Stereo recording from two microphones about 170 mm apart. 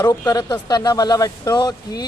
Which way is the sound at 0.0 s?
20° left (ahead or behind).